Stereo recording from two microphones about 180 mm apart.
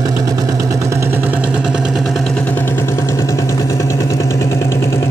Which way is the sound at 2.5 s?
10° left (ahead or behind).